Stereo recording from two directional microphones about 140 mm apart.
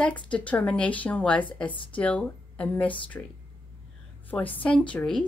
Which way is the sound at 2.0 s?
10° left (ahead or behind).